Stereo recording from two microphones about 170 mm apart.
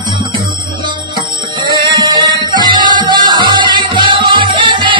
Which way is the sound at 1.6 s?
25° right (ahead or behind).